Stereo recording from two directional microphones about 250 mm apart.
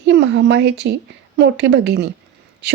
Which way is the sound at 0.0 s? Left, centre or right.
Right.